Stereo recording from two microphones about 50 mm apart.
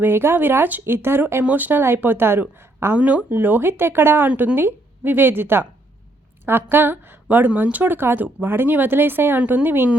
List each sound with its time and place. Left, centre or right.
0.0 s speech: right
1.5 s speech: right
1.8 s speech: right
2.9 s speech: right
3.3 s speech: right
6.7 s a woman's voice: right
7.3 s speech: right